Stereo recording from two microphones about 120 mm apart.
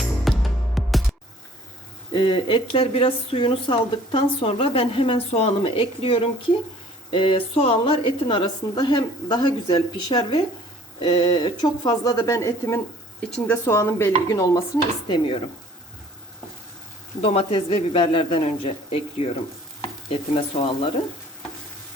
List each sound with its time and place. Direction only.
0.0 s music: centre (ahead or behind)
2.1 s a woman's voice: 45° left (ahead or behind)
15.0 s speech: 45° left (ahead or behind)
17.2 s speech: 55° left (ahead or behind)